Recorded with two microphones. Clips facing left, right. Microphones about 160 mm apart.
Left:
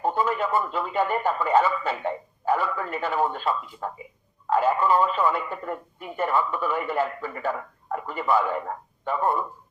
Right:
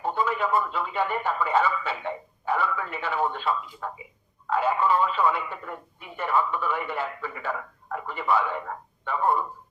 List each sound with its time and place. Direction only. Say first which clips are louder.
0.0 s speech: left 2 dB; 45° left (ahead or behind)